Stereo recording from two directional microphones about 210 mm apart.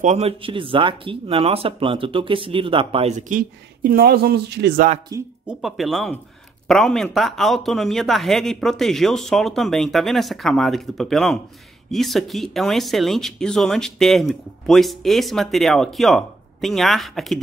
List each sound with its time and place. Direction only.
0.0 s speech: 30° right (ahead or behind)
3.9 s speech: 45° right (ahead or behind)
5.1 s speech: 15° right (ahead or behind)
5.5 s speech: centre (ahead or behind)